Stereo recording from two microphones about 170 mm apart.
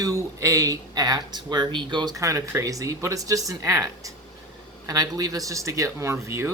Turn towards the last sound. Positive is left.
turn(degrees=-15)  # may be behind; listen again after turning